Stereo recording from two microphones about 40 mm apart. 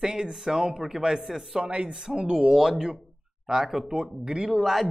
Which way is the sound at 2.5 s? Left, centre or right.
Centre.